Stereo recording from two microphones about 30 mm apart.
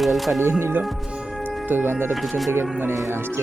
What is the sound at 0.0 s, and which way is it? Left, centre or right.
Speech, centre.